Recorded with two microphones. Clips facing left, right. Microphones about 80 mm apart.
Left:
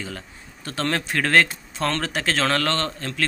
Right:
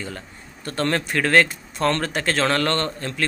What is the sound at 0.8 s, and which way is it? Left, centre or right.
Speech, right.